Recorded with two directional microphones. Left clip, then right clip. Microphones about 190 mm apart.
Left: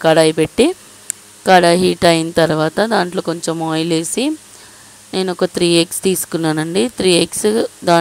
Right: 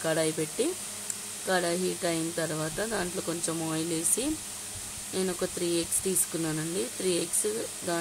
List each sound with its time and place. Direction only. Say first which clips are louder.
0.0 s speech: left 17 dB; 50° left (ahead or behind)